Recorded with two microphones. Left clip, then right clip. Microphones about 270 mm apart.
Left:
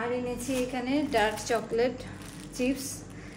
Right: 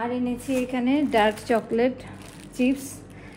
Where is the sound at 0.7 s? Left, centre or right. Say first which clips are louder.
Right 5 dB; right.